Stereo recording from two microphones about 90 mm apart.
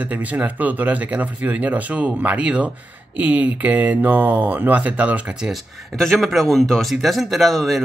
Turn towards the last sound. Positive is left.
turn(degrees=0)  # may be behind; listen again after turning